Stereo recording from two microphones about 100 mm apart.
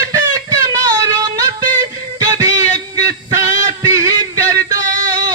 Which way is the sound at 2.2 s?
40° right (ahead or behind).